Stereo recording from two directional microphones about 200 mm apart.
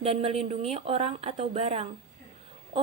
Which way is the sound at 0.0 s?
30° right (ahead or behind).